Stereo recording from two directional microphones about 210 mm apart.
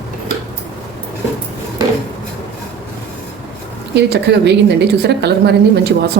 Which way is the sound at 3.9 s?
55° right (ahead or behind).